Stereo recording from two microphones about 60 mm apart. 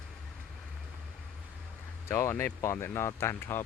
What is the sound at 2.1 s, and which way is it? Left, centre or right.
Speech, left.